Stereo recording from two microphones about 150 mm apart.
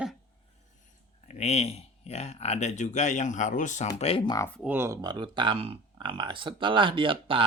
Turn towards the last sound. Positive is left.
turn(degrees=-35)  # may be behind; listen again after turning